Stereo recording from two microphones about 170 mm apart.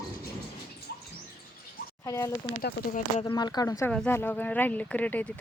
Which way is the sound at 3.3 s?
25° left (ahead or behind).